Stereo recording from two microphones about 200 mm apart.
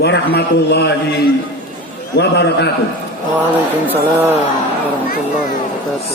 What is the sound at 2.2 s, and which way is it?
Speech, 55° left (ahead or behind).